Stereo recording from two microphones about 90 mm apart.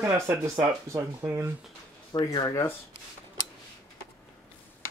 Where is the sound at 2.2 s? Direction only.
40° left (ahead or behind).